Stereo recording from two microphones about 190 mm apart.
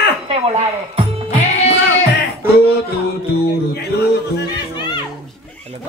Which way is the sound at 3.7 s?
60° left (ahead or behind).